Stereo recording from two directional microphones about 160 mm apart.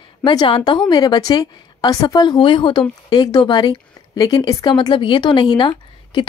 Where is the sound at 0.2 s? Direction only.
30° left (ahead or behind).